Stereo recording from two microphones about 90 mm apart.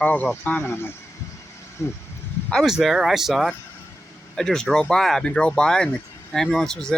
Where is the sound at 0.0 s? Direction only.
20° left (ahead or behind).